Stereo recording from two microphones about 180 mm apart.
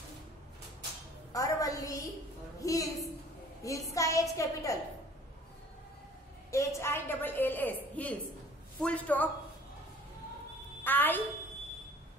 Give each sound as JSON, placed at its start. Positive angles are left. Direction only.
{"t": 1.3, "sound": "a sound", "side_deg": 20}
{"t": 2.6, "sound": "a woman's voice", "side_deg": 20}
{"t": 6.5, "sound": "a woman's voice", "side_deg": 15}
{"t": 10.8, "sound": "a woman's voice", "side_deg": 10}